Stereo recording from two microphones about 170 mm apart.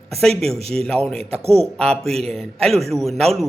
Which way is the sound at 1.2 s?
35° right (ahead or behind).